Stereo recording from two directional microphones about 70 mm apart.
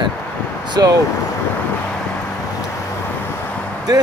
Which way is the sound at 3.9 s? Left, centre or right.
Right.